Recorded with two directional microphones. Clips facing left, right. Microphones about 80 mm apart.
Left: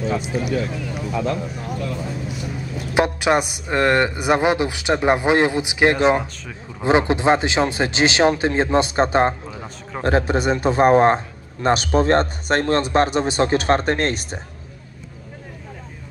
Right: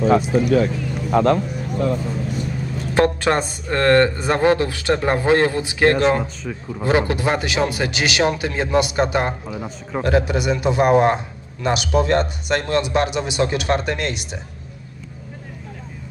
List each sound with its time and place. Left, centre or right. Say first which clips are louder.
1.1 s speech: right 8 dB; right
2.9 s speech: even; centre; by 9.3 s left
9.5 s a man's voice: right 4 dB; centre
10.0 s a man's voice: left 1 dB; left